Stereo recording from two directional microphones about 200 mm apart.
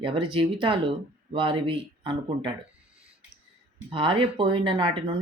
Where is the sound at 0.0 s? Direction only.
25° right (ahead or behind).